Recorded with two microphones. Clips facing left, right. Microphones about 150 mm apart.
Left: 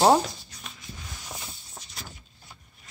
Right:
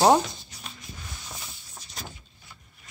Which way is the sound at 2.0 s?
45° right (ahead or behind).